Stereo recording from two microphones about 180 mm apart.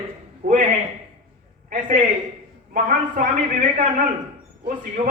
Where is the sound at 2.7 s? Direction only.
50° right (ahead or behind).